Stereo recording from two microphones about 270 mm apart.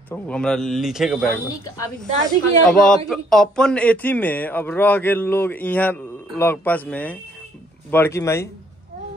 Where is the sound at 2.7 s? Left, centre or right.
Centre.